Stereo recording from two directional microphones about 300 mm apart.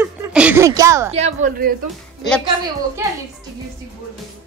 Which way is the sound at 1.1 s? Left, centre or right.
Right.